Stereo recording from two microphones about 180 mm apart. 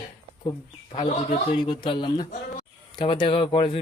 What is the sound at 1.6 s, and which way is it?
A man's voice, 25° left (ahead or behind).